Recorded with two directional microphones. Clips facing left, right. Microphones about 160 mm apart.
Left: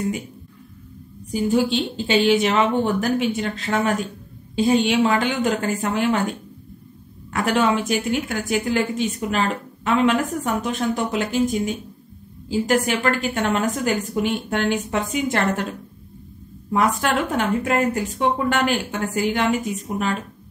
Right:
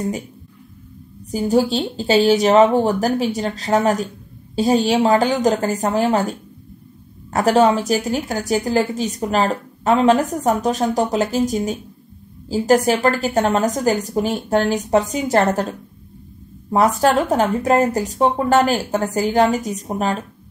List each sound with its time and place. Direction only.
1.3 s a woman's voice: 40° right (ahead or behind)
17.3 s a woman's voice: 40° right (ahead or behind)